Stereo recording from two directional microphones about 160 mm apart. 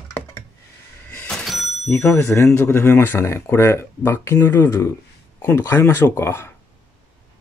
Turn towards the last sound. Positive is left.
turn(degrees=15)  # may be behind; listen again after turning